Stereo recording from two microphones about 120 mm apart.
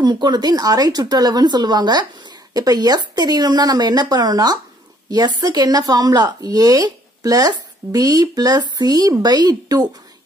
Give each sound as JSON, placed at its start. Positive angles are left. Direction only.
{"t": 0.0, "sound": "speech", "side_deg": -35}